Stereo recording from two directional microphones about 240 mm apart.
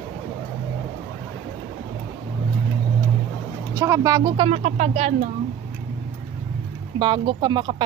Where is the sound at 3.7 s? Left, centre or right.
Centre.